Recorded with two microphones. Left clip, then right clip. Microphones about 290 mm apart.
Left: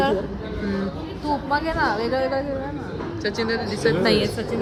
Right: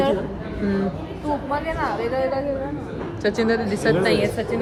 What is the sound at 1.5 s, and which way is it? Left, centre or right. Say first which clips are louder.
Speech: left 4 dB; left.